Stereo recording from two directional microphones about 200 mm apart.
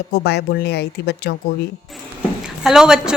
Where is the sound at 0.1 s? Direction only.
55° left (ahead or behind).